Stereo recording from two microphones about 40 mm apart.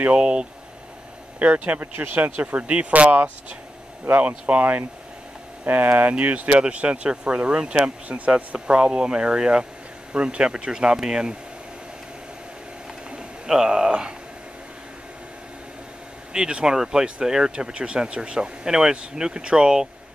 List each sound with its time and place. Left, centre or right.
0.2 s speech: right
1.4 s speech: right
5.9 s speech: right; by 11.3 s centre
13.1 s speech: centre
16.3 s speech: right